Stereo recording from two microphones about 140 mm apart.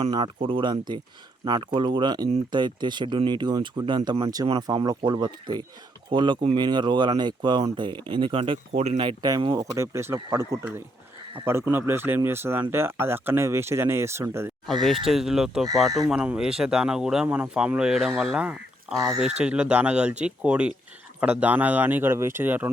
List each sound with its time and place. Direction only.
0.4 s speech: 35° right (ahead or behind)
8.7 s speech: 50° right (ahead or behind); by 14.5 s 20° right (ahead or behind)
14.7 s speech: centre (ahead or behind)